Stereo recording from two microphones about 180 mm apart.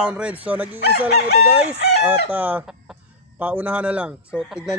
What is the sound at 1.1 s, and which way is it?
Chicken, 65° left (ahead or behind).